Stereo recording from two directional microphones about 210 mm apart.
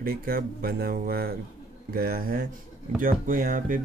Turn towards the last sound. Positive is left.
turn(degrees=-40)  # may be behind; listen again after turning